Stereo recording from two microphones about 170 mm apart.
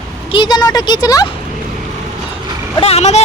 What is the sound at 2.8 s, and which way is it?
Speech, 40° left (ahead or behind).